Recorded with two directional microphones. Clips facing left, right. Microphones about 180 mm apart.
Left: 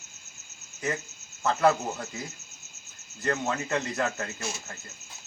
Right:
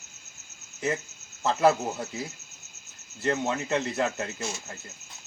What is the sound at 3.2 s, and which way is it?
Speech, 25° right (ahead or behind).